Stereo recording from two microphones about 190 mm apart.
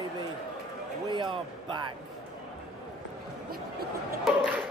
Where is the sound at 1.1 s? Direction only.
25° right (ahead or behind).